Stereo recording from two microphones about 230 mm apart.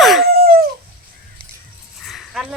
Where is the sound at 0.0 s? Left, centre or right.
Centre.